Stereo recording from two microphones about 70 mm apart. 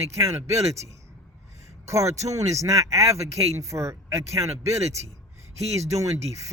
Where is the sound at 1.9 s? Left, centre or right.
Right.